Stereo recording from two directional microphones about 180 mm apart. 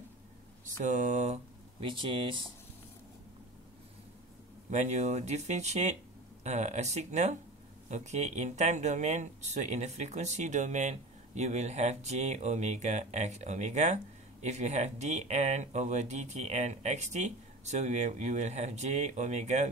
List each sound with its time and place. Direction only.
0.7 s speech: 45° right (ahead or behind); by 2.4 s 30° right (ahead or behind)
4.6 s speech: 40° right (ahead or behind)